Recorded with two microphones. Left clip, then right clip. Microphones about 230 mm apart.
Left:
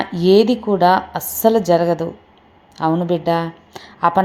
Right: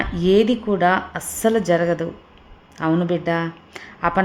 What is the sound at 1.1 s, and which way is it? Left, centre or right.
A woman's voice, centre.